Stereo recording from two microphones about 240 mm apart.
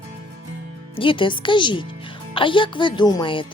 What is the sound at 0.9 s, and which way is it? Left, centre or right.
Speech, left.